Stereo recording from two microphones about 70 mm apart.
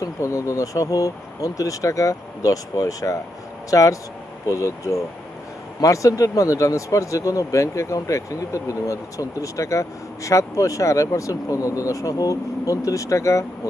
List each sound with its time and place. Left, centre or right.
0.0 s speech: left